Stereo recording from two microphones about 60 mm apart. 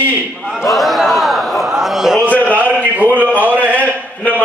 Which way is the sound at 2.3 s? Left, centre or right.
Left.